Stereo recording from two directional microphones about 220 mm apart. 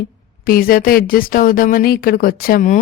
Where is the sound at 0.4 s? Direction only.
40° left (ahead or behind).